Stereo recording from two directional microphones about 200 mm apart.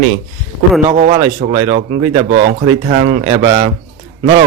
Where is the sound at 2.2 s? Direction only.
40° right (ahead or behind).